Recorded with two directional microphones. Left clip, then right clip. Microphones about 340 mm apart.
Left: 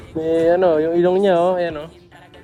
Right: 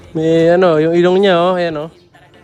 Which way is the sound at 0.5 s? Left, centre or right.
Left.